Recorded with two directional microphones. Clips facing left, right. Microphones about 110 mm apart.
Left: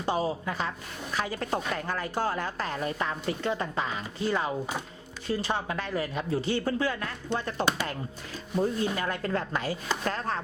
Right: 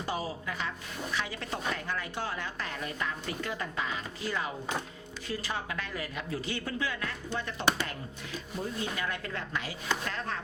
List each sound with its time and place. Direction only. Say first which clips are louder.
0.0 s a woman's voice: left 6 dB; 25° left (ahead or behind)